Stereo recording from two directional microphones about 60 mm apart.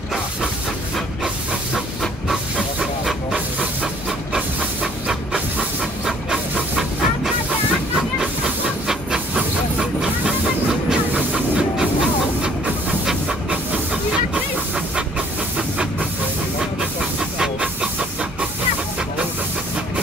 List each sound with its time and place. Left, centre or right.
2.2 s hiss: centre
5.6 s pant: centre
6.8 s train: centre
10.9 s hiss: centre
13.0 s pant: centre
17.2 s hiss: centre